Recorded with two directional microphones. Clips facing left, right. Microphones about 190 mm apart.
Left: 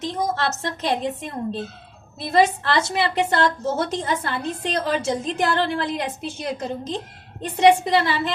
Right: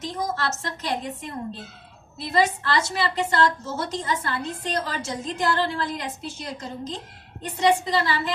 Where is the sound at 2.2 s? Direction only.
60° left (ahead or behind).